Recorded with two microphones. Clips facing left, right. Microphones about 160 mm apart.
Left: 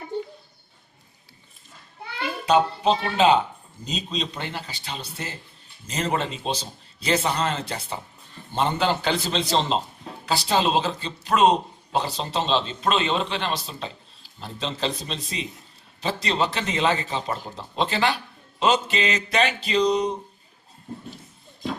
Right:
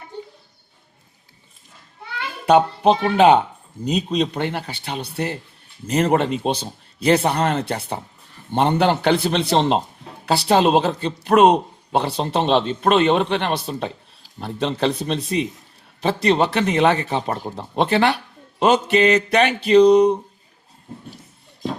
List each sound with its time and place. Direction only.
2.5 s speech: 55° right (ahead or behind)